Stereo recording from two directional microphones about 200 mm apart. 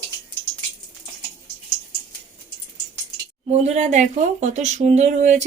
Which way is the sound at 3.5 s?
35° right (ahead or behind).